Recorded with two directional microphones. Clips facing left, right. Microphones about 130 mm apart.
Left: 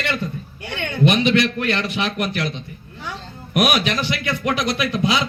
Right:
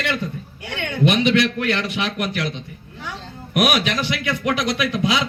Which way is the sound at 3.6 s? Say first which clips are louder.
Even; 30° left (ahead or behind).